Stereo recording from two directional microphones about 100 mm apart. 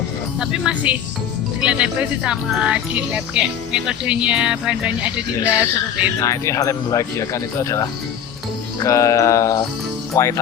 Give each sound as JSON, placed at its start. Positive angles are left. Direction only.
{"t": 0.3, "sound": "speech", "side_deg": -5}
{"t": 6.1, "sound": "speech", "side_deg": 30}